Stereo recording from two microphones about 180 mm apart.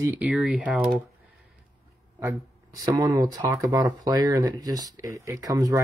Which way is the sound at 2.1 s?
15° right (ahead or behind).